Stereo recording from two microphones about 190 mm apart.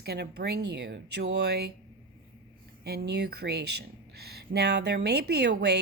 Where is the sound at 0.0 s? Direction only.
55° right (ahead or behind).